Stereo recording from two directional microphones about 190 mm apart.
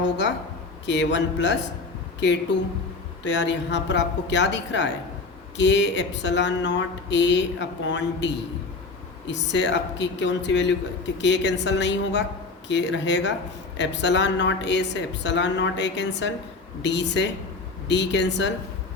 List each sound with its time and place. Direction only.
0.9 s speech: 70° left (ahead or behind)
3.2 s speech: 70° left (ahead or behind)